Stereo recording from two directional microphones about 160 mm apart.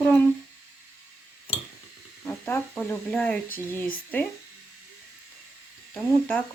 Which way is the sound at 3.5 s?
60° left (ahead or behind).